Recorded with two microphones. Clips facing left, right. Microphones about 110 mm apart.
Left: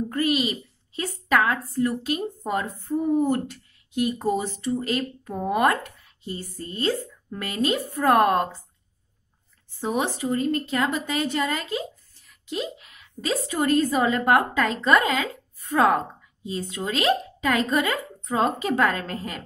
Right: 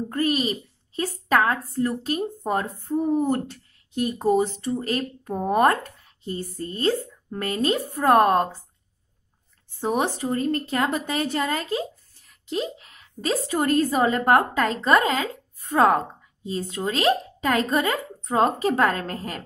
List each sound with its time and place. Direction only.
0.1 s a woman's voice: 40° right (ahead or behind)
2.6 s speech: 15° right (ahead or behind)
4.3 s speech: 45° right (ahead or behind)
6.0 s a sound: 45° right (ahead or behind)
6.6 s speech: 40° right (ahead or behind)
7.8 s a woman's voice: 20° right (ahead or behind)
9.8 s speech: 50° right (ahead or behind)
10.3 s speech: 40° right (ahead or behind)